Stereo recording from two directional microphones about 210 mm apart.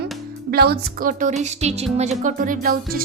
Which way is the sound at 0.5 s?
45° right (ahead or behind).